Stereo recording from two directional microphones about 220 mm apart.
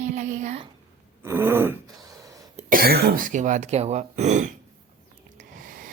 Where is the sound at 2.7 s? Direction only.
45° right (ahead or behind).